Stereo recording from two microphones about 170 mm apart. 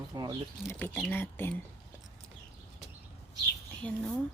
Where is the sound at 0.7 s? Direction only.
10° left (ahead or behind).